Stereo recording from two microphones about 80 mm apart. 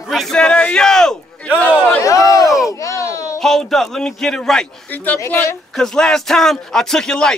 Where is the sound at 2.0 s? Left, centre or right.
Left.